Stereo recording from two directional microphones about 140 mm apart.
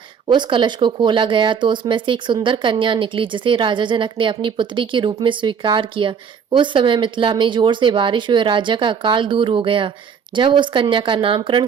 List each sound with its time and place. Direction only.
0.3 s speech: 35° right (ahead or behind)